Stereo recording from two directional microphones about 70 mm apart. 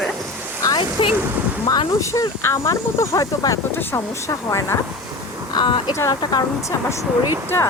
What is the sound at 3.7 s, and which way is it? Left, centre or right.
Speech, left.